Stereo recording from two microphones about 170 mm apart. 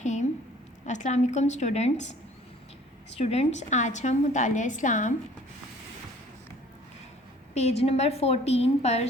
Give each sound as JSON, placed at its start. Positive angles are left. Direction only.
{"t": 0.0, "sound": "a sound", "side_deg": 45}
{"t": 0.9, "sound": "a woman's voice", "side_deg": 45}
{"t": 3.2, "sound": "a woman's voice", "side_deg": 35}
{"t": 7.5, "sound": "a woman's voice", "side_deg": 40}